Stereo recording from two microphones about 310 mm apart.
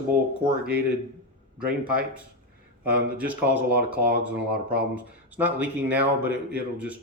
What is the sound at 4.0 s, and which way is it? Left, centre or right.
Speech, right.